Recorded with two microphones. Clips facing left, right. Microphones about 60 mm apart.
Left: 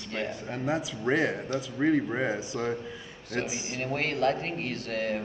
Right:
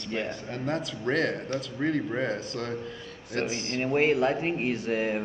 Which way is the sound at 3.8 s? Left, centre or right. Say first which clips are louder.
Right 6 dB; centre.